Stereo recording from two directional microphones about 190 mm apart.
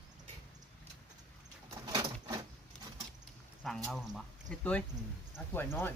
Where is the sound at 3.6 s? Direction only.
Centre (ahead or behind).